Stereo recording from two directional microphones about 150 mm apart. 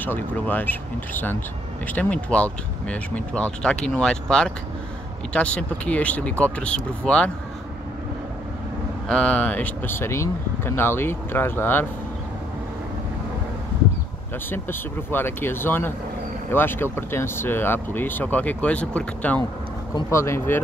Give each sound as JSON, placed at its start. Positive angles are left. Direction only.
{"t": 0.0, "sound": "speech", "side_deg": 10}
{"t": 9.1, "sound": "speech", "side_deg": 5}
{"t": 14.5, "sound": "speech", "side_deg": 15}